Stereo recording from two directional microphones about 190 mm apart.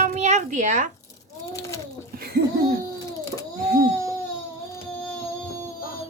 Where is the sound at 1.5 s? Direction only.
15° left (ahead or behind).